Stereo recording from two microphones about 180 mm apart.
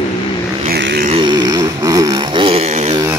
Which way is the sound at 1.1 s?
25° right (ahead or behind).